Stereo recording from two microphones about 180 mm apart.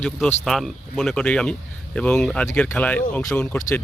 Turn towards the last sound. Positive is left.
turn(degrees=10)  # may be behind; listen again after turning